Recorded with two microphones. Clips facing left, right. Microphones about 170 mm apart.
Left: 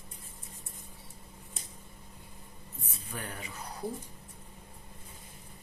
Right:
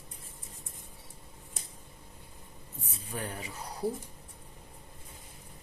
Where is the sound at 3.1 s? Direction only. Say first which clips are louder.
Right 3 dB; 30° right (ahead or behind).